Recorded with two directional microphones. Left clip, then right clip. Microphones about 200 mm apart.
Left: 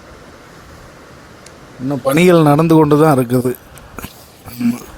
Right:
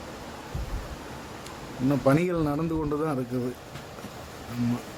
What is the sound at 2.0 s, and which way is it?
A man's voice, 50° left (ahead or behind).